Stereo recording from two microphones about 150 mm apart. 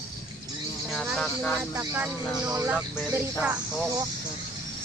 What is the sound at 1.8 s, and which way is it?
Speech, 20° right (ahead or behind).